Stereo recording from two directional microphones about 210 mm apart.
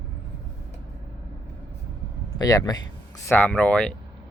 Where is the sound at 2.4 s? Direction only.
15° left (ahead or behind).